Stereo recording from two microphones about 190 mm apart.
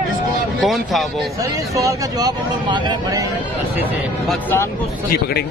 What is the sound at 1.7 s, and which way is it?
Speech, 15° right (ahead or behind).